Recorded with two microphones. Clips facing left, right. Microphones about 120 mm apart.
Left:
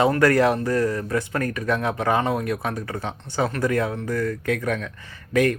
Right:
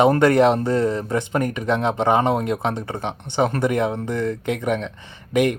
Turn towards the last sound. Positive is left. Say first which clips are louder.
# right 1 dB
turn(degrees=-20)  # may be behind; listen again after turning